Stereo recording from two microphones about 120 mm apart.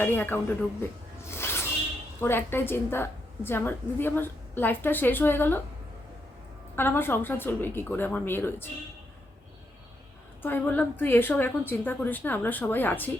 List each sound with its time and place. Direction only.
0.0 s a woman's voice: 15° left (ahead or behind)
1.3 s a sound: 20° left (ahead or behind)
2.2 s a woman's voice: 20° left (ahead or behind)
6.7 s a woman's voice: 20° left (ahead or behind)
10.4 s a woman's voice: 15° left (ahead or behind)